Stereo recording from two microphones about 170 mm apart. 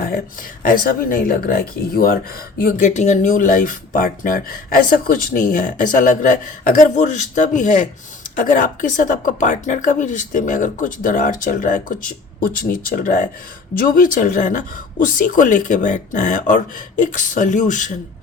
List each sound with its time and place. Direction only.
0.6 s speech: 55° left (ahead or behind)